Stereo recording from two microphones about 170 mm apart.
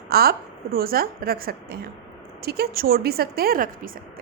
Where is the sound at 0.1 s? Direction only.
65° right (ahead or behind).